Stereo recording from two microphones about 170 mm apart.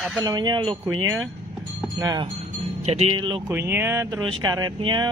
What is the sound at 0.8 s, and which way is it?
Speech, 15° right (ahead or behind).